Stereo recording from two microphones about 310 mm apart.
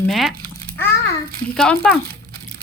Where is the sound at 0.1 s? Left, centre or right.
Centre.